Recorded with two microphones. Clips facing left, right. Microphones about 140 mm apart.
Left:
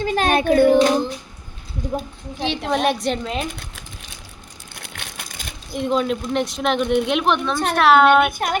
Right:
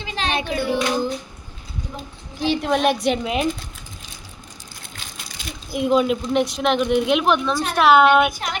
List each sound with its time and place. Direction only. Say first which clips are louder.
0.0 s child singing: left 7 dB; 50° left (ahead or behind)
2.4 s speech: right 2 dB; centre (ahead or behind)
4.7 s crushing: left 5 dB; 65° left (ahead or behind)
5.7 s speech: right 2 dB; 5° right (ahead or behind)
8.3 s speech: left 5 dB; 50° left (ahead or behind)